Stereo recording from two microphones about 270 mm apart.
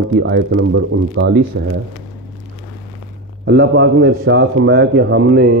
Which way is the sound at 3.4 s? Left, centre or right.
Right.